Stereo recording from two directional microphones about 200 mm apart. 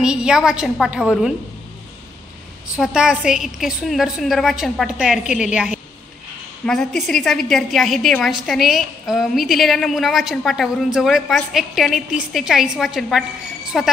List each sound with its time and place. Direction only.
0.0 s a woman's voice: 5° right (ahead or behind)
2.7 s a woman's voice: 5° right (ahead or behind)